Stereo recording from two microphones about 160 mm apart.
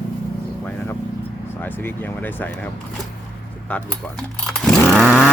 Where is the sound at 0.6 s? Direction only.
10° left (ahead or behind).